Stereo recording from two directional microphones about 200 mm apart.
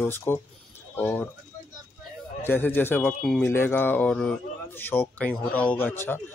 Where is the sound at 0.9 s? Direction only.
10° left (ahead or behind).